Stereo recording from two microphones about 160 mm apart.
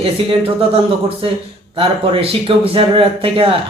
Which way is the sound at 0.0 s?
35° right (ahead or behind).